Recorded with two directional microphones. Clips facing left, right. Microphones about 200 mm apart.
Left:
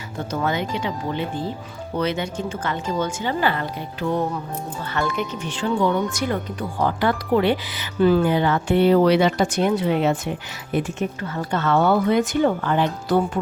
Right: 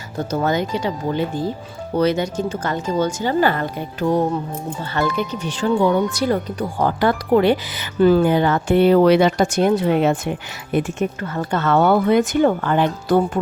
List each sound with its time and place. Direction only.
0.3 s speech: 40° right (ahead or behind)
11.2 s speech: 50° right (ahead or behind)